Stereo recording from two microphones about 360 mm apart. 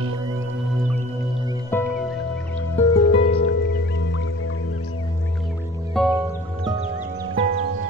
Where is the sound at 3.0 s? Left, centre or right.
Left.